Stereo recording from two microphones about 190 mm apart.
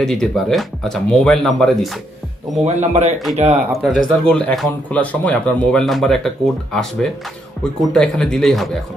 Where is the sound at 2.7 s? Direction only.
35° right (ahead or behind).